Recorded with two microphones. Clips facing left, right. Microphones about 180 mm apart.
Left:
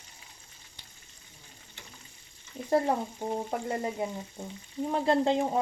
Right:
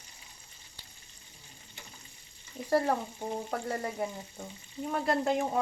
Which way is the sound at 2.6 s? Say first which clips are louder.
Left 1 dB; 20° left (ahead or behind).